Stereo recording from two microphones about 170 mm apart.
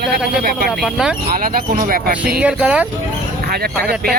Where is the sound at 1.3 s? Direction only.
55° right (ahead or behind).